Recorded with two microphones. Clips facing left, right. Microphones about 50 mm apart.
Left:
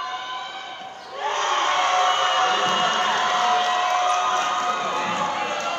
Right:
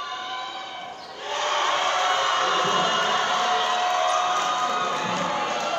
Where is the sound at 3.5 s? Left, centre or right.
Centre.